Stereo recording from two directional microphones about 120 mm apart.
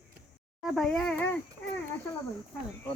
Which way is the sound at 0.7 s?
Centre (ahead or behind).